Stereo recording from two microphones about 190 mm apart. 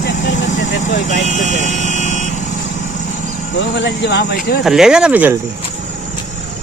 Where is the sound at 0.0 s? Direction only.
80° left.